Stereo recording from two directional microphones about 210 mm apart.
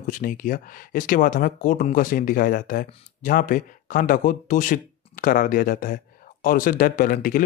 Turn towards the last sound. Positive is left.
turn(degrees=40)  # may be behind; listen again after turning